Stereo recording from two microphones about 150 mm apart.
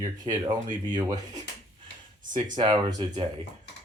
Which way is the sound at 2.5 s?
30° right (ahead or behind).